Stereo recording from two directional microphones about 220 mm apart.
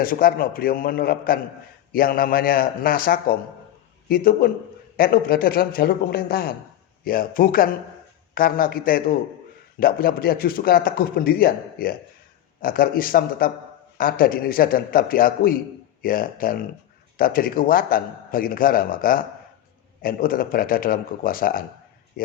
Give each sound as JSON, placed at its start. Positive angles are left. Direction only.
{"t": 0.0, "sound": "a man's voice", "side_deg": 40}